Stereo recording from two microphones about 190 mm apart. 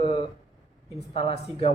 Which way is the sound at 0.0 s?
25° left (ahead or behind).